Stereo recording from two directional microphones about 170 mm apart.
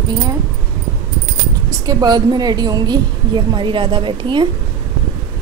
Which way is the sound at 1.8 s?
25° right (ahead or behind).